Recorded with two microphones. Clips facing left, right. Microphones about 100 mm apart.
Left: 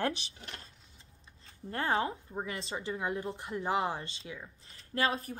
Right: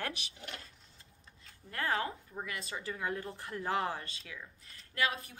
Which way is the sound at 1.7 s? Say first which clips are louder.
Left 3 dB; 25° left (ahead or behind).